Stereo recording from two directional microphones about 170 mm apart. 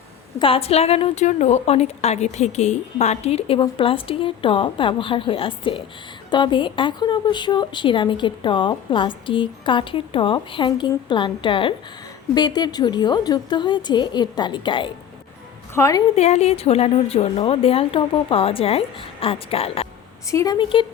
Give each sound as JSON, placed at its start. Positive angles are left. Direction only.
{"t": 0.3, "sound": "a woman's voice", "side_deg": 35}
{"t": 15.7, "sound": "a woman's voice", "side_deg": 20}
{"t": 16.1, "sound": "a woman's voice", "side_deg": 40}
{"t": 20.3, "sound": "a woman's voice", "side_deg": 20}